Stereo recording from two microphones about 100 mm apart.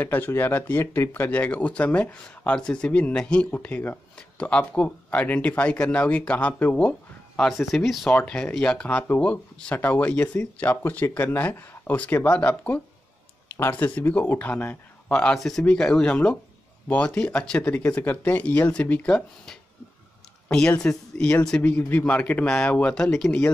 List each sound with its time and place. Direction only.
0.0 s speech: 20° left (ahead or behind)
7.4 s speech: centre (ahead or behind)
8.1 s speech: 10° left (ahead or behind)